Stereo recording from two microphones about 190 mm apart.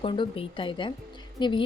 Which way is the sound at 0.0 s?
30° left (ahead or behind).